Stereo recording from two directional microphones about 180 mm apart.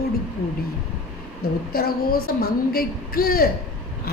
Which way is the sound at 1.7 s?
60° left (ahead or behind).